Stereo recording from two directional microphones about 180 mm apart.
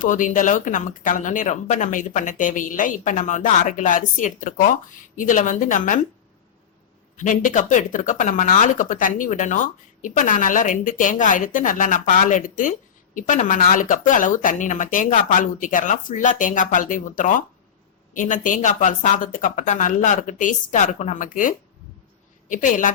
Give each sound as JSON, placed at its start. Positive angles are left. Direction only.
{"t": 0.0, "sound": "speech", "side_deg": 45}
{"t": 7.2, "sound": "speech", "side_deg": 45}